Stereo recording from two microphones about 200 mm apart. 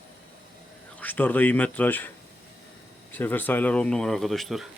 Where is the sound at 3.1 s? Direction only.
10° left (ahead or behind).